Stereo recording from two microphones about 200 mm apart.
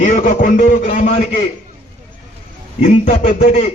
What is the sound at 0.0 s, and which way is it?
A man's voice, 40° left (ahead or behind).